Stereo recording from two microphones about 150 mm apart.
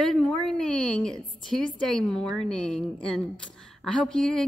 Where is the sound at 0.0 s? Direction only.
5° left (ahead or behind).